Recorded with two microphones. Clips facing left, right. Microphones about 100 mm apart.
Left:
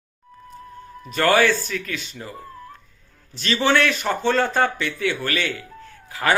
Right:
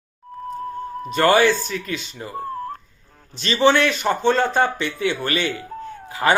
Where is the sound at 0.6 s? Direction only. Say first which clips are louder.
Right 10 dB; 45° right (ahead or behind).